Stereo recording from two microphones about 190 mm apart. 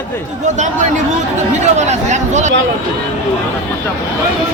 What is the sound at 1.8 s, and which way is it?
Speech, 35° right (ahead or behind).